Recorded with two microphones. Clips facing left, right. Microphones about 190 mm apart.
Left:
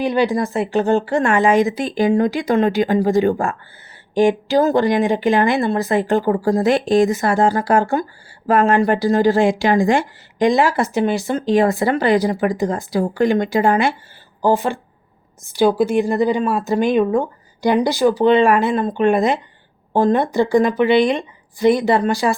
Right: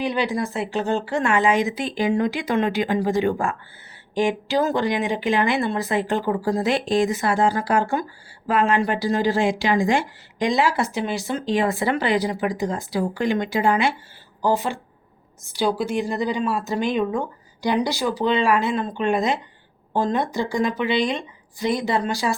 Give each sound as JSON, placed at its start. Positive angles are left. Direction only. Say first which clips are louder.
{"t": 0.0, "sound": "a woman's voice", "louder": "left 6 dB", "side_deg": 45}